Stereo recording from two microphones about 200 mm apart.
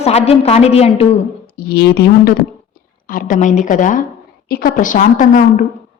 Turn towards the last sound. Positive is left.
turn(degrees=40)  # may be behind; listen again after turning